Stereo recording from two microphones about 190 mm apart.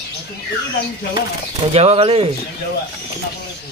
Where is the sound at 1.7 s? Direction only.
35° right (ahead or behind).